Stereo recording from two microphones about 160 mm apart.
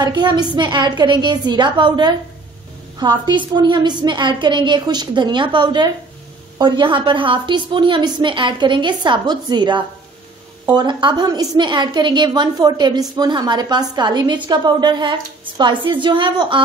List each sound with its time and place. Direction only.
0.0 s a woman's voice: 25° right (ahead or behind)